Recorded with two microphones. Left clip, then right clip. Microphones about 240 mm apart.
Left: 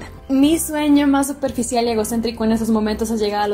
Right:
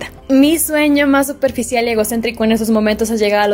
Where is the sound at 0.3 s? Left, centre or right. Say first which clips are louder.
Right 5 dB; right.